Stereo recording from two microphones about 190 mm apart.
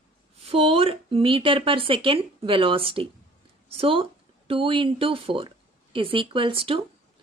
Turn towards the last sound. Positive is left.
turn(degrees=-30)  # may be behind; listen again after turning